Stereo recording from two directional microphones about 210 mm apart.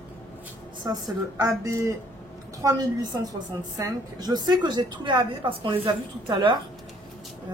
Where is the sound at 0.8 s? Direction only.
20° right (ahead or behind).